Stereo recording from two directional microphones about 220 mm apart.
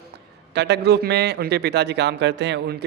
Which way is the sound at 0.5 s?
50° right (ahead or behind).